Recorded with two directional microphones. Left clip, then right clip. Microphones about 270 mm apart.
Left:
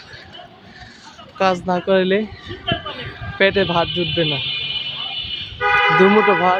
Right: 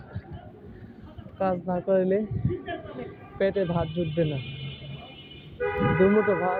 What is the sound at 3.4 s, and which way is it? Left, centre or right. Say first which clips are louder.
Speech: left 10 dB; left.